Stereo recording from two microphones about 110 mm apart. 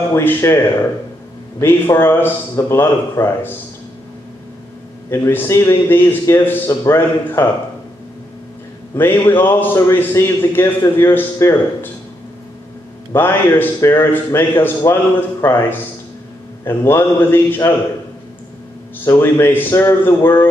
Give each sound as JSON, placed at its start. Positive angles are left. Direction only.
{"t": 0.1, "sound": "a man's voice", "side_deg": 20}
{"t": 1.6, "sound": "a man's voice", "side_deg": 20}
{"t": 5.1, "sound": "a man's voice", "side_deg": 20}
{"t": 8.9, "sound": "a man's voice", "side_deg": 20}
{"t": 13.1, "sound": "a man's voice", "side_deg": 20}
{"t": 16.6, "sound": "a man's voice", "side_deg": 20}
{"t": 19.0, "sound": "a man's voice", "side_deg": 20}